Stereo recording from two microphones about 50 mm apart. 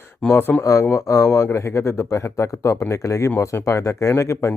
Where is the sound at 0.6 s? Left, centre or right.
Left.